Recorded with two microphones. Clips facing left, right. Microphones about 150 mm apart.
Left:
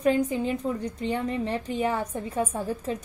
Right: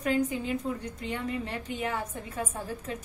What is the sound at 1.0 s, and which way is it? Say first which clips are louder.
A woman's voice: left 6 dB; 30° left (ahead or behind).